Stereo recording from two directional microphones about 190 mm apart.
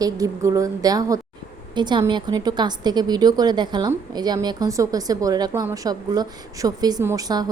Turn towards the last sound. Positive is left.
turn(degrees=-20)  # may be behind; listen again after turning